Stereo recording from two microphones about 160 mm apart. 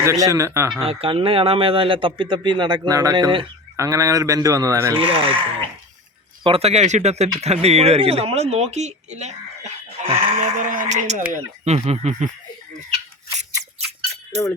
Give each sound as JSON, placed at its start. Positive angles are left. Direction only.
{"t": 0.0, "sound": "speech", "side_deg": -20}
{"t": 1.0, "sound": "speech", "side_deg": -35}
{"t": 4.9, "sound": "speech", "side_deg": -35}